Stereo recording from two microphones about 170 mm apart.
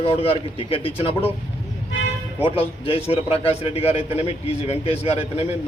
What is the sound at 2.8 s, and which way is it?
Speech, 35° left (ahead or behind).